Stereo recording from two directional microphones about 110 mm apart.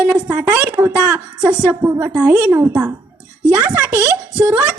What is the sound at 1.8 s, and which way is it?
A woman's voice, 25° right (ahead or behind).